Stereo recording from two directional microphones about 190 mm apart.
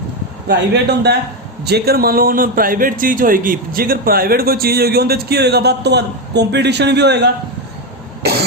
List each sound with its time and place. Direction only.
0.4 s a man's voice: 60° right (ahead or behind)